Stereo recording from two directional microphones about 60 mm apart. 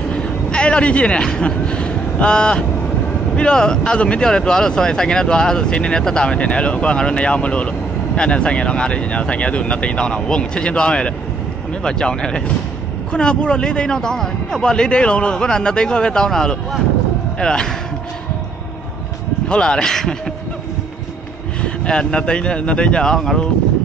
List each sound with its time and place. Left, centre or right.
0.1 s speech: centre
19.5 s speech: centre
21.5 s speech: centre